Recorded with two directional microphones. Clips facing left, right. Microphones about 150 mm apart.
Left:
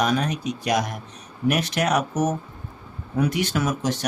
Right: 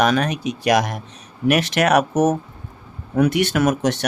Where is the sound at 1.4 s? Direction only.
75° right (ahead or behind).